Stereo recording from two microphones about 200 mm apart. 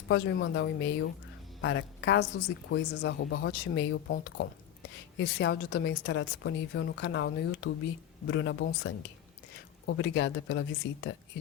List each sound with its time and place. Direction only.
0.1 s a woman's voice: 70° left (ahead or behind)